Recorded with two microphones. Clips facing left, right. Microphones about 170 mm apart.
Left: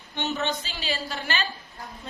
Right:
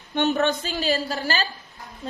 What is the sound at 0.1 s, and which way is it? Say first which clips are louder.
A woman's voice: right 7 dB; 55° right (ahead or behind).